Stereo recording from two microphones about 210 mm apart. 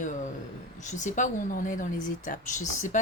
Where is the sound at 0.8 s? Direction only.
35° left (ahead or behind).